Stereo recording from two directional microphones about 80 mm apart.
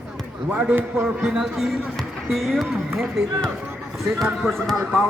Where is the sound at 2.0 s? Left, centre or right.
Centre.